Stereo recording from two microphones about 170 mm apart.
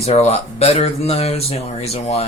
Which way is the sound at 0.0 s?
40° left (ahead or behind).